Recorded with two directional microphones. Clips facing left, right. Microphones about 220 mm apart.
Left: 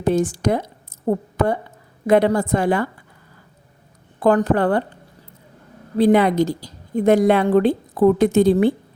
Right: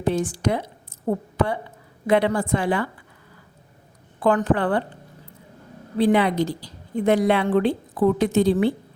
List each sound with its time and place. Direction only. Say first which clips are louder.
0.0 s a woman's voice: left 4 dB; 45° left (ahead or behind)
4.2 s a woman's voice: left 4 dB; 40° left (ahead or behind)
6.0 s a woman's voice: left 4 dB; 45° left (ahead or behind)